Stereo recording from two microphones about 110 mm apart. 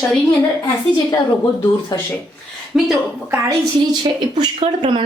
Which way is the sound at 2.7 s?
5° right (ahead or behind).